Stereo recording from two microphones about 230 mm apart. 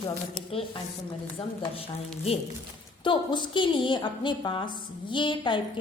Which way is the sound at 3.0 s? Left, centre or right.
Left.